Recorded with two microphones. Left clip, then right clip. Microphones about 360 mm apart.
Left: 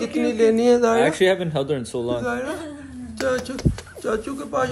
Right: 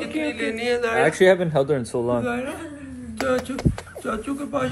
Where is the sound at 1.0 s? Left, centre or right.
Centre.